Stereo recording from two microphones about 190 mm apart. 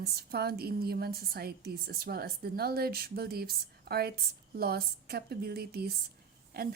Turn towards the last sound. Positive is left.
turn(degrees=-55)  # may be behind; listen again after turning